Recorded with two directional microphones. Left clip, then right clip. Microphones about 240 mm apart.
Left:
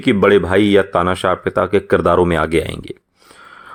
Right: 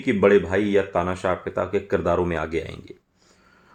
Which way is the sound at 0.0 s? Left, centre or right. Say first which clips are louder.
Left 5 dB; left.